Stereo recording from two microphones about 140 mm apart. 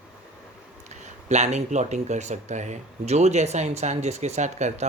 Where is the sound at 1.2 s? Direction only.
55° right (ahead or behind).